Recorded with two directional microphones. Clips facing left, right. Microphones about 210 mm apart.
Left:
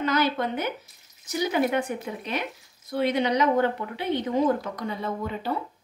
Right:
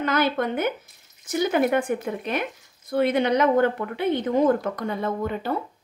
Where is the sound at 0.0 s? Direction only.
55° right (ahead or behind).